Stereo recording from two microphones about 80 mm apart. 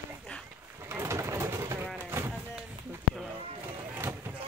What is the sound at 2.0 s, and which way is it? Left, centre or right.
Clip-clop, right.